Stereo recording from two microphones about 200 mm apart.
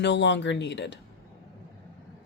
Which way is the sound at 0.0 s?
65° left (ahead or behind).